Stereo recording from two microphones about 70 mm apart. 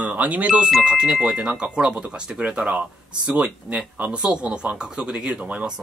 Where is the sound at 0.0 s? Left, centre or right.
Right.